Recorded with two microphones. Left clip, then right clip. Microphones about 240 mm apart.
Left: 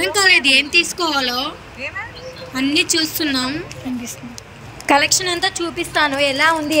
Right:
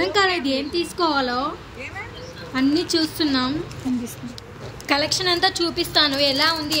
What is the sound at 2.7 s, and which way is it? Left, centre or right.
Speech, left.